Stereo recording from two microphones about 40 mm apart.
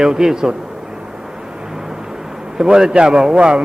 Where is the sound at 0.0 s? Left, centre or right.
Centre.